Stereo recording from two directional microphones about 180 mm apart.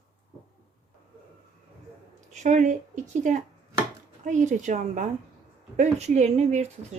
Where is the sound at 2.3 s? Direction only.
40° right (ahead or behind).